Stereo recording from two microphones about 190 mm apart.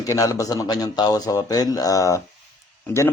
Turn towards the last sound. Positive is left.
turn(degrees=15)  # may be behind; listen again after turning